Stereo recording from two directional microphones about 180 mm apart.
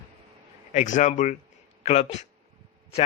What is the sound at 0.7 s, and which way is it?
A man's voice, 40° left (ahead or behind).